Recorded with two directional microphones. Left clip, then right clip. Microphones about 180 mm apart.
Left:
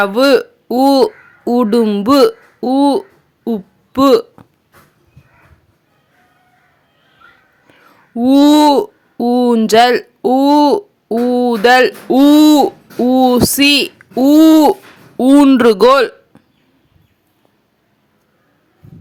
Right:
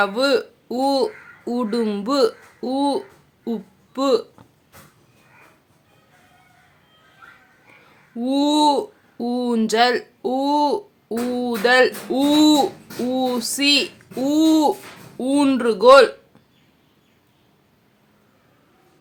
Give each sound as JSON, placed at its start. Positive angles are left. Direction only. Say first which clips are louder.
{"t": 0.0, "sound": "speech", "louder": "left 8 dB", "side_deg": 40}
{"t": 3.4, "sound": "a sound", "louder": "left 8 dB", "side_deg": 35}
{"t": 8.1, "sound": "speech", "louder": "left 10 dB", "side_deg": 40}